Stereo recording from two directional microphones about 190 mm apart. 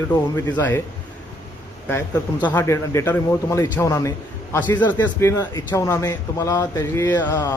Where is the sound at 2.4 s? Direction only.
15° left (ahead or behind).